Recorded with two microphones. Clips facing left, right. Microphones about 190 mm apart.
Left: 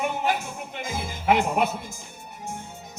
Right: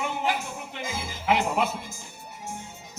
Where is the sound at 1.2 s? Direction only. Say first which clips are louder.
Left 3 dB; 55° left (ahead or behind).